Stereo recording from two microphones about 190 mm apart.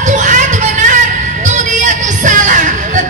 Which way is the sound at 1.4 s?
40° right (ahead or behind).